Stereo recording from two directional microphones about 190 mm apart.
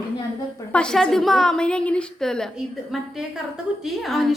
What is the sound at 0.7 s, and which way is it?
A woman's voice, 5° left (ahead or behind).